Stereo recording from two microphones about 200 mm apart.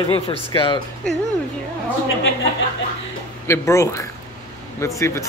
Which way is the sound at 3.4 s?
15° left (ahead or behind).